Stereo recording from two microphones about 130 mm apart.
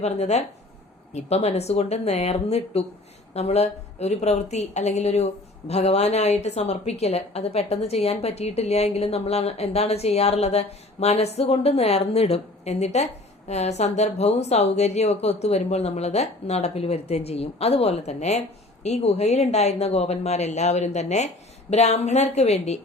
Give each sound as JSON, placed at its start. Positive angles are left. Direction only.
{"t": 0.0, "sound": "a woman's voice", "side_deg": 55}